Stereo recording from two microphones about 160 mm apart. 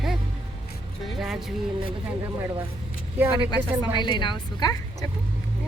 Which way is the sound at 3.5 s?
25° left (ahead or behind).